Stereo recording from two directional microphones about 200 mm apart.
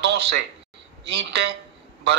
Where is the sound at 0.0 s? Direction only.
60° right (ahead or behind).